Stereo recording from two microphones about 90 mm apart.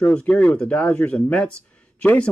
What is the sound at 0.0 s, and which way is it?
Speech, 15° left (ahead or behind).